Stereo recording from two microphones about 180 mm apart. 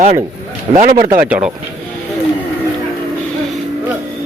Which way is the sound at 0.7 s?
45° right (ahead or behind).